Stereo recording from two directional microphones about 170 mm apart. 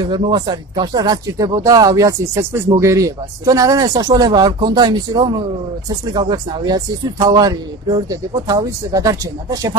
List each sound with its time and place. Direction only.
0.0 s speech: 25° right (ahead or behind)